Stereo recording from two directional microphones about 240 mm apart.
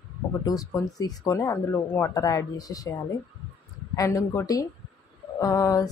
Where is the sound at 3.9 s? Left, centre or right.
Centre.